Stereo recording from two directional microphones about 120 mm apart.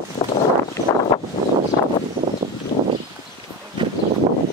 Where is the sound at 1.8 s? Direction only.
30° left (ahead or behind).